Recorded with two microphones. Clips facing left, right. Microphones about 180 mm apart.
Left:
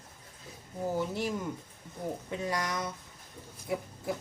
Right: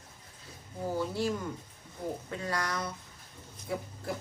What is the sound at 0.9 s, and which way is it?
Speech, 20° left (ahead or behind).